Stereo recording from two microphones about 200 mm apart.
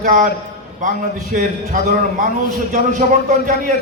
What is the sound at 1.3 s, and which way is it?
A man's voice, 40° right (ahead or behind).